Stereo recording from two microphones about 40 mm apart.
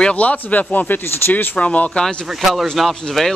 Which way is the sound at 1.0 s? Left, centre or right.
Left.